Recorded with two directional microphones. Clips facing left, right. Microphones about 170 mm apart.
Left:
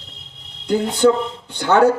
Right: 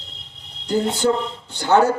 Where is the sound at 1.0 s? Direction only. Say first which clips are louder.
Left 5 dB; 55° left (ahead or behind).